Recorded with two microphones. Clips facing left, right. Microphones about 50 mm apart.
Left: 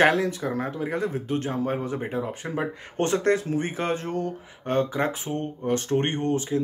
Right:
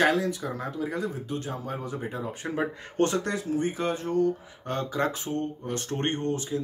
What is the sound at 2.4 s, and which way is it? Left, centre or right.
Speech, centre.